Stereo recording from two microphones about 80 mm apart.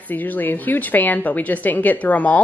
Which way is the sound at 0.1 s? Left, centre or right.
Left.